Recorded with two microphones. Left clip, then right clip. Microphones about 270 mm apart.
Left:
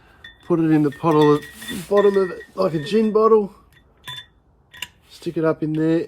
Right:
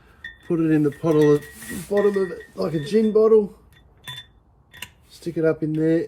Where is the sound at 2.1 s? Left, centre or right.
Left.